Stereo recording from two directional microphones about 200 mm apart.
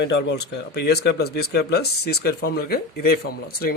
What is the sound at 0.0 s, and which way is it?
Speech, 65° left (ahead or behind).